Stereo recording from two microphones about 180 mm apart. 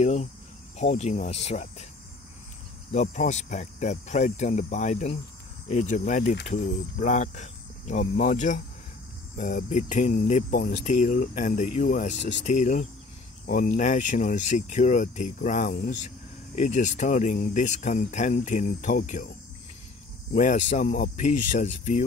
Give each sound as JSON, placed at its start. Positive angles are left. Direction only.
{"t": 0.0, "sound": "cricket", "side_deg": 40}
{"t": 0.7, "sound": "speech", "side_deg": 40}
{"t": 2.9, "sound": "speech", "side_deg": 40}
{"t": 20.3, "sound": "speech", "side_deg": 45}